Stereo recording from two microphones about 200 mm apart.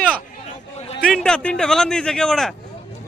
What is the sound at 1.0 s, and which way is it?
A man's voice, 5° left (ahead or behind).